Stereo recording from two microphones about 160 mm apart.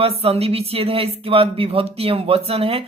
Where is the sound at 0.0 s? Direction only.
40° right (ahead or behind).